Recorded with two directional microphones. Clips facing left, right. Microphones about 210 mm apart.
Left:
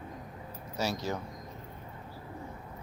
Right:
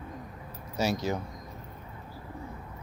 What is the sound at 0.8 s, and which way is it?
Speech, 20° right (ahead or behind).